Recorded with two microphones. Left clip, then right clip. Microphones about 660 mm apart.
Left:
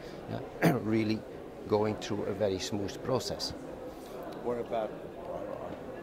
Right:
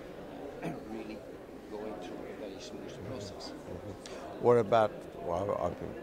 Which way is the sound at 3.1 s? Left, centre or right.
Left.